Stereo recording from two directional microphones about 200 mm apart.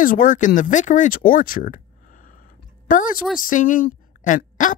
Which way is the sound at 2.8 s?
40° left (ahead or behind).